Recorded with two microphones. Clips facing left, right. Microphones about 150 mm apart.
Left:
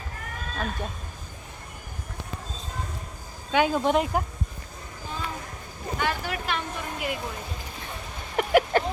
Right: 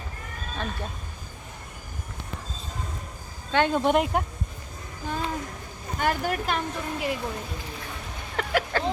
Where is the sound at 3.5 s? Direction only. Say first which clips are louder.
Even; 5° left (ahead or behind).